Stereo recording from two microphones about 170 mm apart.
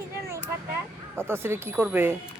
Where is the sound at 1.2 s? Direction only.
15° right (ahead or behind).